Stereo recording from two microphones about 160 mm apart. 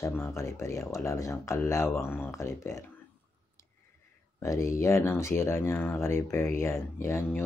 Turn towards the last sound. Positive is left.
turn(degrees=15)  # may be behind; listen again after turning